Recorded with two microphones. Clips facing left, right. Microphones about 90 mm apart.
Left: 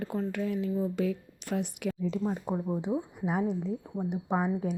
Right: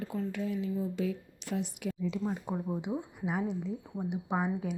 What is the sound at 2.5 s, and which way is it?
Speech, 40° left (ahead or behind).